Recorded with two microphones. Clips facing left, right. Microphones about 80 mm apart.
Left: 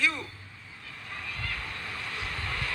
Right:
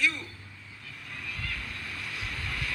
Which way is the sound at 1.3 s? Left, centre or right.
Centre.